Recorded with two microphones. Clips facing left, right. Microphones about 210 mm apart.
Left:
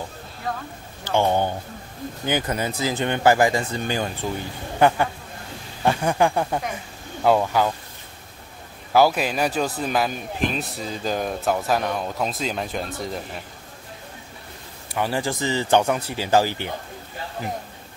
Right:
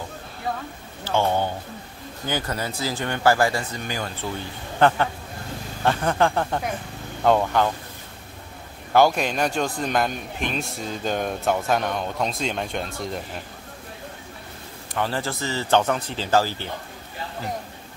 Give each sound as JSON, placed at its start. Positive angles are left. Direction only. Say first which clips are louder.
{"t": 1.0, "sound": "speech", "louder": "left 2 dB", "side_deg": 15}
{"t": 3.7, "sound": "speech", "louder": "left 5 dB", "side_deg": 30}
{"t": 4.7, "sound": "speech", "louder": "left 1 dB", "side_deg": 10}
{"t": 8.9, "sound": "a man's voice", "louder": "even", "side_deg": 5}
{"t": 15.0, "sound": "speech", "louder": "left 2 dB", "side_deg": 15}